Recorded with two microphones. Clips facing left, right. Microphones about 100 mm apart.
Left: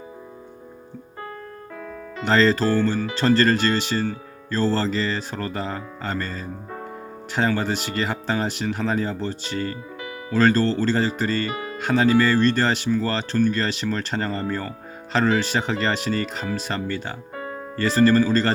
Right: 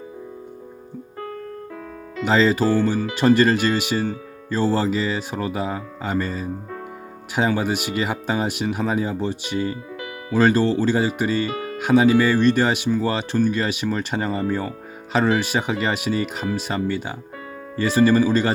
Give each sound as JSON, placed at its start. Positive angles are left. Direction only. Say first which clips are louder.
{"t": 2.2, "sound": "speech", "louder": "right 1 dB", "side_deg": -5}